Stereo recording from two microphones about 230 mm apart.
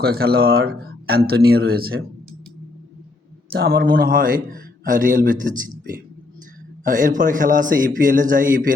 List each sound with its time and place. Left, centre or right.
0.0 s speech: right
0.7 s a sound: right
1.5 s speech: right
3.5 s a man's voice: right
6.8 s a man's voice: right